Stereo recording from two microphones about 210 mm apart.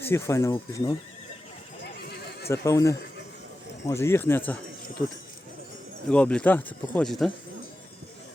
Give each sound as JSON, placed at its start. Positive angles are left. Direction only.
{"t": 0.0, "sound": "speech", "side_deg": 10}
{"t": 1.8, "sound": "neigh", "side_deg": 50}
{"t": 2.5, "sound": "speech", "side_deg": 15}
{"t": 6.1, "sound": "speech", "side_deg": 5}